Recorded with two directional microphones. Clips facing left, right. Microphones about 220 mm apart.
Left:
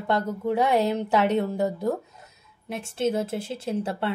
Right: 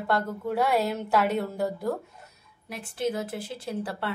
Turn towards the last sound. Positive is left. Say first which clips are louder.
# left 4 dB
turn(degrees=25)  # may be behind; listen again after turning